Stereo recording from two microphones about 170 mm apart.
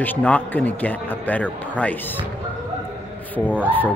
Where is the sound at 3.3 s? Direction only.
10° left (ahead or behind).